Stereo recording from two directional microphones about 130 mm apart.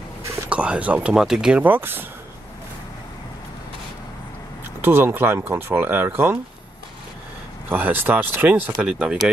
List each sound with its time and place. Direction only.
0.5 s speech: 10° right (ahead or behind)
4.8 s speech: 15° right (ahead or behind)
7.7 s speech: 15° right (ahead or behind)